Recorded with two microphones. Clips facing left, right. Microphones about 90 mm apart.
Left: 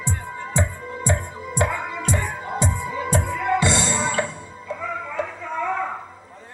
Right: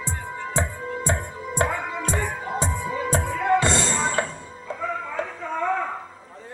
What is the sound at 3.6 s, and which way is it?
Music, 40° right (ahead or behind).